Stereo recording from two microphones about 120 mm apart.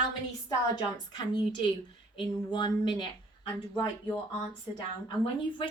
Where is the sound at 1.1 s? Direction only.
40° left (ahead or behind).